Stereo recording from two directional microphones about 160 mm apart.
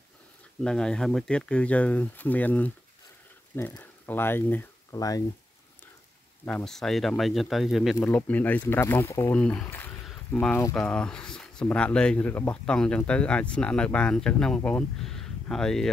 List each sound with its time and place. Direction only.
0.7 s speech: 5° left (ahead or behind); by 5.2 s 25° left (ahead or behind)
6.4 s speech: 5° left (ahead or behind)
8.0 s speech: 10° left (ahead or behind)